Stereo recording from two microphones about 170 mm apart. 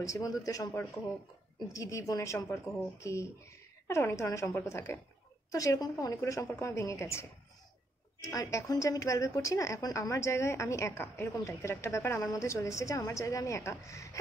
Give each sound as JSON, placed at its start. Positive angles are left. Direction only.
{"t": 0.0, "sound": "a woman's voice", "side_deg": 20}